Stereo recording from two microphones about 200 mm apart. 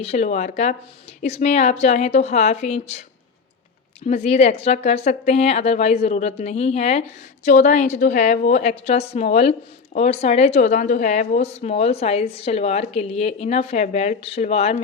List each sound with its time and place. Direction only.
0.0 s a woman's voice: 35° left (ahead or behind)
4.0 s a woman's voice: 35° left (ahead or behind)